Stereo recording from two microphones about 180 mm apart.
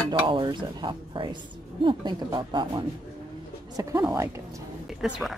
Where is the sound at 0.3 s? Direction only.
25° right (ahead or behind).